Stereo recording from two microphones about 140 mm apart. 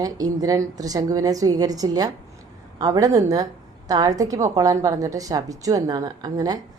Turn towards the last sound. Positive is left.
turn(degrees=-30)  # may be behind; listen again after turning